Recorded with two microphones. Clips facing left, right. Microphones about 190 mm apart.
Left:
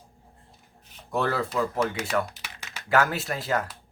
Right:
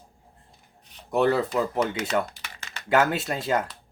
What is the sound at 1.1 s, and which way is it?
Speech, 20° right (ahead or behind).